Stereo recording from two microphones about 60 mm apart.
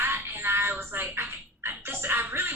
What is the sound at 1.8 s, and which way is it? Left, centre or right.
Music, right.